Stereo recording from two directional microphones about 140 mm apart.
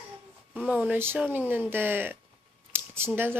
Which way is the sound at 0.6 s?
10° right (ahead or behind).